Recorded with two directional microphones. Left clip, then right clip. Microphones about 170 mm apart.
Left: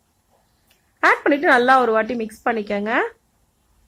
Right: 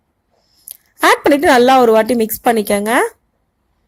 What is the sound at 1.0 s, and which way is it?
A woman's voice, 35° right (ahead or behind).